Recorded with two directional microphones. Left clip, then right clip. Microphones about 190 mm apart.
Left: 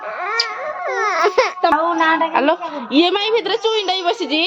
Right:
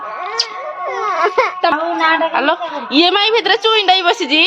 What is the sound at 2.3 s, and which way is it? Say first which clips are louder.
Speech: right 1 dB; 25° left (ahead or behind).